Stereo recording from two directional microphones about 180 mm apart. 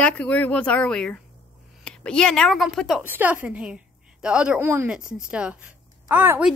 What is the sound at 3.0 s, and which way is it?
A woman's voice, 10° right (ahead or behind).